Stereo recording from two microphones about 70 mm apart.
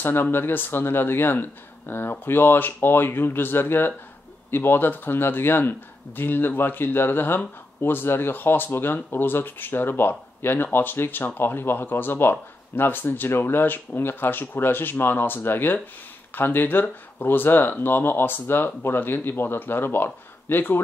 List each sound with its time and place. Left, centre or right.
0.0 s speech: left